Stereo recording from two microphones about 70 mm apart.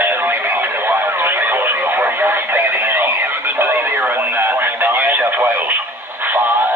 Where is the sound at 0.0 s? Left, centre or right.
Right.